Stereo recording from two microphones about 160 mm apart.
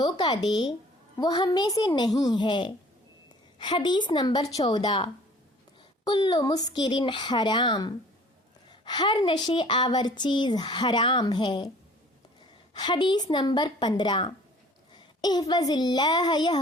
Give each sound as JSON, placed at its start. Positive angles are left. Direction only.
{"t": 0.0, "sound": "a woman's voice", "side_deg": 25}
{"t": 12.7, "sound": "a woman's voice", "side_deg": 30}